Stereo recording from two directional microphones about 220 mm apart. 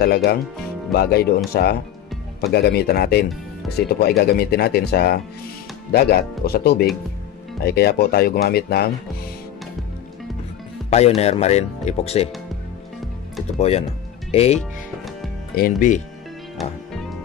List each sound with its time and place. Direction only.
0.0 s speech: 45° left (ahead or behind)
10.9 s speech: 30° left (ahead or behind)
13.6 s speech: 30° left (ahead or behind)
16.5 s music: centre (ahead or behind)